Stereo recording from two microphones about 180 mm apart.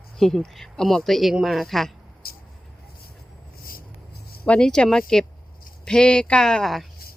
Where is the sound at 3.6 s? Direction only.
55° left (ahead or behind).